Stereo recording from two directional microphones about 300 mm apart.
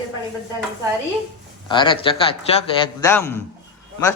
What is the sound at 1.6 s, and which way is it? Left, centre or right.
A man's voice, centre.